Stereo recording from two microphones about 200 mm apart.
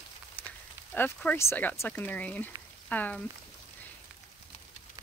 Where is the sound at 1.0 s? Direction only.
10° left (ahead or behind).